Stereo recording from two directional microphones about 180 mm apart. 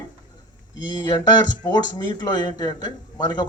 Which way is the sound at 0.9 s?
25° left (ahead or behind).